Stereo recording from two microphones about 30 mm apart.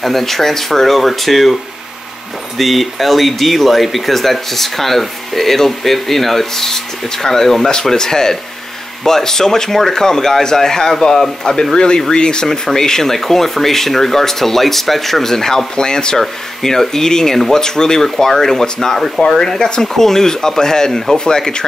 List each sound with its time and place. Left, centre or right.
0.0 s speech: centre; by 12.4 s left
12.4 s speech: centre
16.2 s speech: centre
18.0 s speech: centre